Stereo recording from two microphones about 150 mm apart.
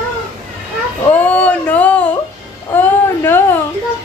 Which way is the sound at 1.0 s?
10° left (ahead or behind).